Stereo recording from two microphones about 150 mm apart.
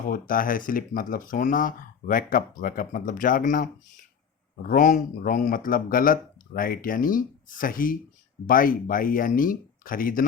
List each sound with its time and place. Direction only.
0.0 s speech: 70° left (ahead or behind)
4.7 s speech: 60° left (ahead or behind)